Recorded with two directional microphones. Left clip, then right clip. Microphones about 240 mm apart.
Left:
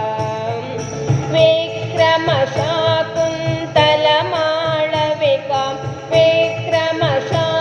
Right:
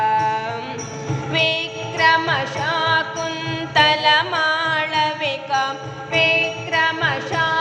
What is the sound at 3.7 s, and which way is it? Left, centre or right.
Carnatic music, right.